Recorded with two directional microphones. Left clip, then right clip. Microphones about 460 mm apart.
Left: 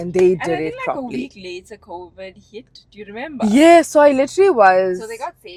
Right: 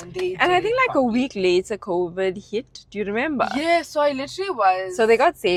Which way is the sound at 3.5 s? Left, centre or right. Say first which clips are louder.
Left 11 dB; left.